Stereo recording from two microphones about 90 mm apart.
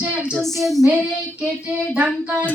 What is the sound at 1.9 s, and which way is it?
Speech, 15° right (ahead or behind).